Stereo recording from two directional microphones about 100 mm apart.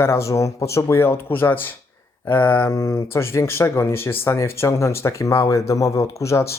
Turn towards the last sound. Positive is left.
turn(degrees=30)  # may be behind; listen again after turning